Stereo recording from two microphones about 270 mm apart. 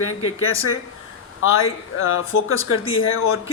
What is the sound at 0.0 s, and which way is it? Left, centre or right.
Speech, left.